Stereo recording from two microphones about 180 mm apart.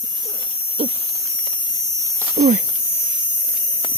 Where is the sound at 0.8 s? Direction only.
35° right (ahead or behind).